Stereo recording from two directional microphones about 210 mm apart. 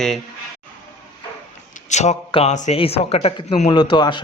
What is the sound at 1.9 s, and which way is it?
A man's voice, 35° left (ahead or behind).